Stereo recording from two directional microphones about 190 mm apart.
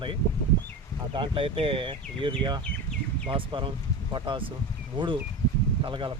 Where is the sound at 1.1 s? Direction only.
25° right (ahead or behind).